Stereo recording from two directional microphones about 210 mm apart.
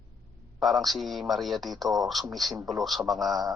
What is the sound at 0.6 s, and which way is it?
A man's voice, centre (ahead or behind).